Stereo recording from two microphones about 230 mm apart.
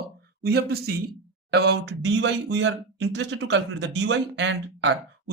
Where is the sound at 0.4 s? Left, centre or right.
Right.